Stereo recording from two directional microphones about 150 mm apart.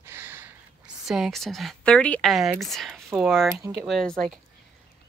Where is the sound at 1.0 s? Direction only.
Centre (ahead or behind).